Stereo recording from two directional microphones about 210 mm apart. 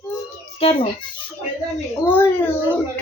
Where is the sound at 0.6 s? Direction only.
25° left (ahead or behind).